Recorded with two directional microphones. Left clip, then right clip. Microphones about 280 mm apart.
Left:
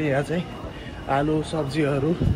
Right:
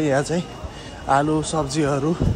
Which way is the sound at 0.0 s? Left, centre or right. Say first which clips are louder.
Right 3 dB; centre.